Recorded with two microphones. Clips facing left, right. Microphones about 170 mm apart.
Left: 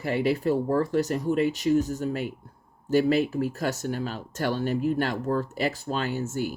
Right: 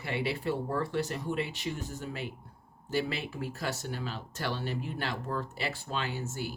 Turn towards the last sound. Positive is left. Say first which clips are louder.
# left 8 dB
turn(degrees=45)  # may be behind; listen again after turning